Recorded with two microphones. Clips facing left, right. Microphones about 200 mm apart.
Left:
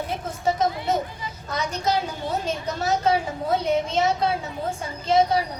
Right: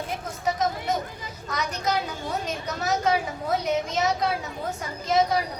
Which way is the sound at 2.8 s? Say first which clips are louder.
Left 2 dB; 30° left (ahead or behind).